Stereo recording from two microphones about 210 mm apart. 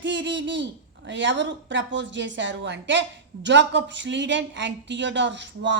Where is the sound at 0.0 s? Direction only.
60° right (ahead or behind).